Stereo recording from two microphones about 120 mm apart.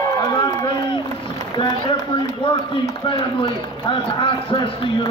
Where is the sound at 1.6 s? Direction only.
45° left (ahead or behind).